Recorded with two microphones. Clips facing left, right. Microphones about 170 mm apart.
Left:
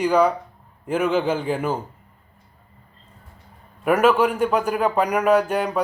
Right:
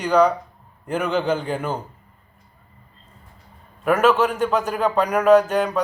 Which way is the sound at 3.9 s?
10° left (ahead or behind).